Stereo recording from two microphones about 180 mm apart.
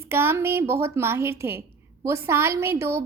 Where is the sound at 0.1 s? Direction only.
15° right (ahead or behind).